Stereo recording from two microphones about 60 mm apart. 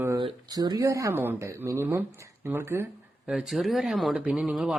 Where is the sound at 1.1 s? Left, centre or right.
Right.